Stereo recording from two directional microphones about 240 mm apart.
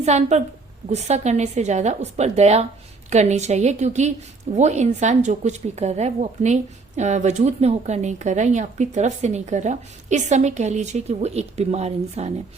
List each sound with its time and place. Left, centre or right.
0.0 s a woman's voice: right